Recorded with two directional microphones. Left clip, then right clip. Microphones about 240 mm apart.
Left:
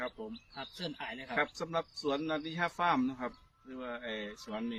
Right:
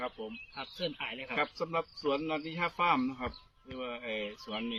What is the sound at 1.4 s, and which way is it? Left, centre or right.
A man's voice, centre.